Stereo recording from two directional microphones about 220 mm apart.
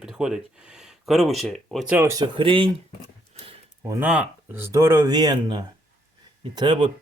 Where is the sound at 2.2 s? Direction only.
25° right (ahead or behind).